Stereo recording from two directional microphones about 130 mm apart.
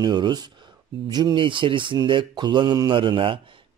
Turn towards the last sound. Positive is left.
turn(degrees=-40)  # may be behind; listen again after turning